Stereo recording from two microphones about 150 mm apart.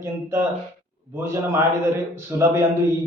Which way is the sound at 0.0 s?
15° right (ahead or behind).